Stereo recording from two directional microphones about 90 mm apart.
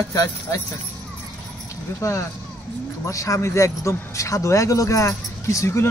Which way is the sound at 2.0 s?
40° left (ahead or behind).